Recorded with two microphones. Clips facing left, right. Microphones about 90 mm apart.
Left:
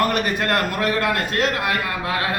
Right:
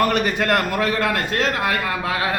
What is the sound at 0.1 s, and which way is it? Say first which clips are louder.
A man's voice: right 2 dB; 20° right (ahead or behind).